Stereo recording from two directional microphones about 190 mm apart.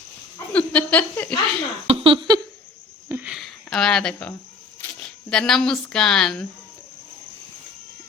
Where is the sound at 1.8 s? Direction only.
30° right (ahead or behind).